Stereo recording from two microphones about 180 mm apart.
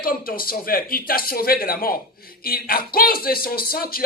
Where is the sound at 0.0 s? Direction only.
55° left (ahead or behind).